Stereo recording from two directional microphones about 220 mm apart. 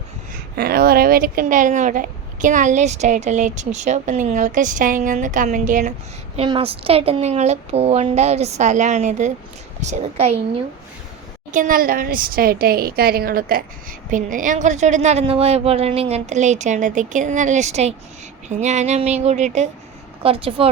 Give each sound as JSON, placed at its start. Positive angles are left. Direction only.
{"t": 0.5, "sound": "speech", "side_deg": -45}
{"t": 6.3, "sound": "speech", "side_deg": -25}
{"t": 11.5, "sound": "a woman's voice", "side_deg": -40}